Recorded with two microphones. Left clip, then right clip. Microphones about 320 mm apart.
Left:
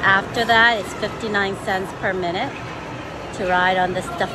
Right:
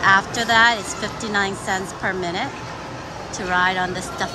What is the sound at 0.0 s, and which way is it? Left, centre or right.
A woman's voice, centre.